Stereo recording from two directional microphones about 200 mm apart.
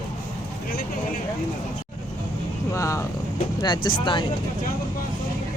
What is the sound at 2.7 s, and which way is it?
Speech, 15° left (ahead or behind).